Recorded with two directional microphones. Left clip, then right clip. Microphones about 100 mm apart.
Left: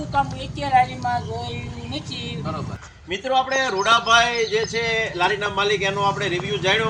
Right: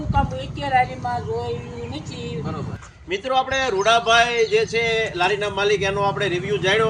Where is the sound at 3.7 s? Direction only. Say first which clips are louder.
Even; 15° left (ahead or behind).